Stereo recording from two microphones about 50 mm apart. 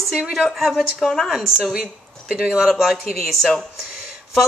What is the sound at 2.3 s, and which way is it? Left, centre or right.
Speech, centre.